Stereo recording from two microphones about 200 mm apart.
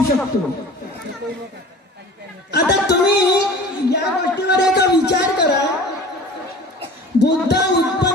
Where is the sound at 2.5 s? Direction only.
55° left (ahead or behind).